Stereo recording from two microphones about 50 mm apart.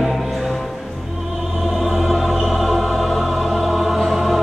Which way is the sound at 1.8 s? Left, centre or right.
Centre.